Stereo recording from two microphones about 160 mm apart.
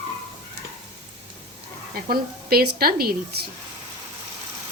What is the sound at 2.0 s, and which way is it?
A woman's voice, 70° right (ahead or behind).